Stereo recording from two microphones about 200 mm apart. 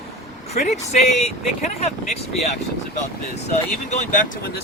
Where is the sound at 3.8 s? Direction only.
40° left (ahead or behind).